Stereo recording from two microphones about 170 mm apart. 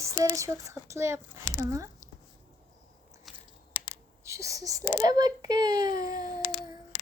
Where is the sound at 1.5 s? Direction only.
20° right (ahead or behind).